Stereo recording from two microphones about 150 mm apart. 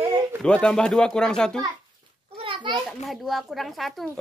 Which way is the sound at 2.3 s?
35° right (ahead or behind).